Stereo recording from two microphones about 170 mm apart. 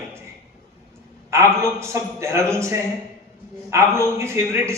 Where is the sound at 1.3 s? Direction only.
15° right (ahead or behind).